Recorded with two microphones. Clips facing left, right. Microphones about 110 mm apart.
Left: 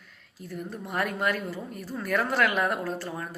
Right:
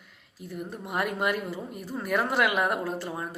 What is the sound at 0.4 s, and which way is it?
A woman's voice, 15° right (ahead or behind).